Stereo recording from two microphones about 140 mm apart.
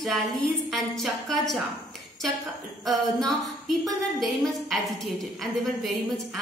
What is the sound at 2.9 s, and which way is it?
A woman's voice, centre (ahead or behind).